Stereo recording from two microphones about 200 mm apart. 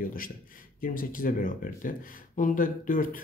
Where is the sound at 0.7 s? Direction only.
45° left (ahead or behind).